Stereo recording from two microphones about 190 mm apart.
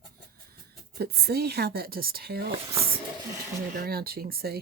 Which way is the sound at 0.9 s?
55° right (ahead or behind).